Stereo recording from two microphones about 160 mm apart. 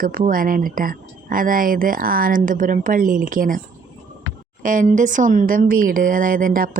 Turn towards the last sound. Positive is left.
turn(degrees=-60)  # may be behind; listen again after turning